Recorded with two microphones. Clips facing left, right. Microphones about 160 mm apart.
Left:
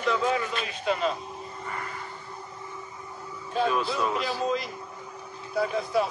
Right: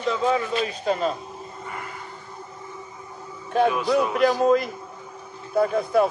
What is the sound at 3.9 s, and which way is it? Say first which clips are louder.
Speech: right 8 dB; 50° right (ahead or behind).